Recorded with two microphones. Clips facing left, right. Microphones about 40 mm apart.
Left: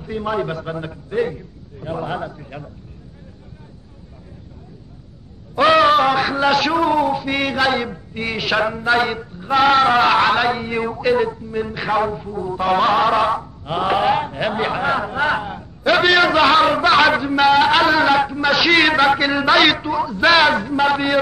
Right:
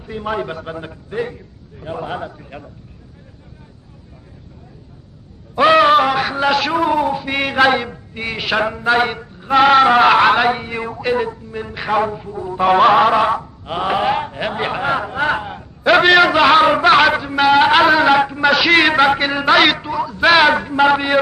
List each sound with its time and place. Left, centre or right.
0.0 s a man's voice: centre
5.6 s a man's voice: centre
7.8 s a man's voice: centre
10.7 s a man's voice: centre
17.1 s a man's voice: centre
20.2 s a man's voice: centre